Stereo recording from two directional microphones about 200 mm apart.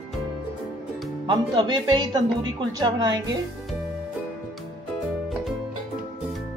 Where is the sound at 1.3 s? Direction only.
20° right (ahead or behind).